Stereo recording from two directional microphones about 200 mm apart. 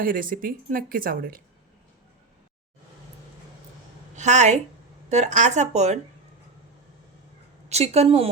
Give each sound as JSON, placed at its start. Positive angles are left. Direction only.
{"t": 0.0, "sound": "speech", "side_deg": -45}
{"t": 4.1, "sound": "a woman's voice", "side_deg": -35}
{"t": 7.7, "sound": "a woman's voice", "side_deg": -30}